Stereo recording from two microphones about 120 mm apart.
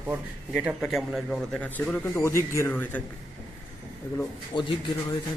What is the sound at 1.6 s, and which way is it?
Speech, 10° left (ahead or behind).